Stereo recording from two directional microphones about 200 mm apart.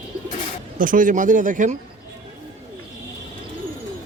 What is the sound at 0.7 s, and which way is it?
Speech, 40° right (ahead or behind).